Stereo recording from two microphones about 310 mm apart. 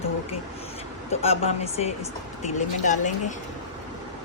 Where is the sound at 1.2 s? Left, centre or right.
Centre.